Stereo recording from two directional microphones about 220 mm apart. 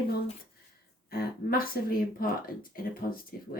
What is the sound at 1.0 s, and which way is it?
Speech, 45° left (ahead or behind).